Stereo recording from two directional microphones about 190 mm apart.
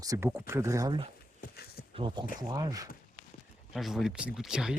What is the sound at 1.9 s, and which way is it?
Speech, 25° right (ahead or behind).